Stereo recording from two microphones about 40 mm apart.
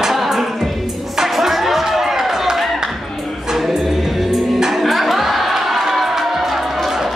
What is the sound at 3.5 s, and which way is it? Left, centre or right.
Music, centre.